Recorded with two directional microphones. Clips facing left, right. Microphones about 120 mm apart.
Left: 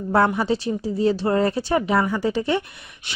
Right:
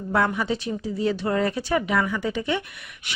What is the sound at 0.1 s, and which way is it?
A woman's voice, 35° left (ahead or behind).